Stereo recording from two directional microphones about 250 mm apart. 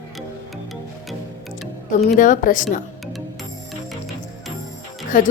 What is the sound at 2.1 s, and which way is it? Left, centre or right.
Speech, left.